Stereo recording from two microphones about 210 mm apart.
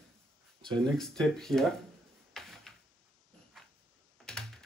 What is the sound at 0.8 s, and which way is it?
Speech, centre (ahead or behind).